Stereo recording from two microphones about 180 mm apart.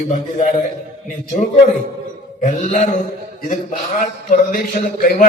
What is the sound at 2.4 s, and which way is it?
A man's voice, 45° left (ahead or behind).